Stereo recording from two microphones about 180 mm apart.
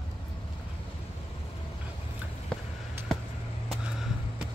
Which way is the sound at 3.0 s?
10° right (ahead or behind).